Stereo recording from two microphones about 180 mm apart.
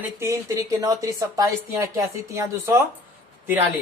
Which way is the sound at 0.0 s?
15° right (ahead or behind).